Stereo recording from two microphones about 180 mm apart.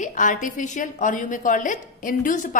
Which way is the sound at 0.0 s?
45° left (ahead or behind).